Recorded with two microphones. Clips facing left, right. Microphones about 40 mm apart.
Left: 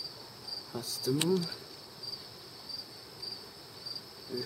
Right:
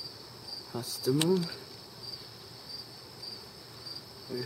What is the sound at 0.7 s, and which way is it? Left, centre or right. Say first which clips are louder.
Speech: right 3 dB; centre.